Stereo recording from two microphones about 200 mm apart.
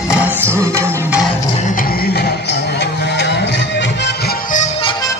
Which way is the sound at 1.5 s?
40° left (ahead or behind).